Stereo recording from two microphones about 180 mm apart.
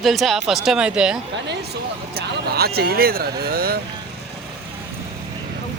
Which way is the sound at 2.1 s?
60° right (ahead or behind).